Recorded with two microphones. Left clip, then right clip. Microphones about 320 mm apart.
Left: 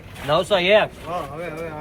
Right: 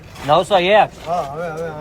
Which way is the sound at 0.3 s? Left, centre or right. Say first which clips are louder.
Right 4 dB; right.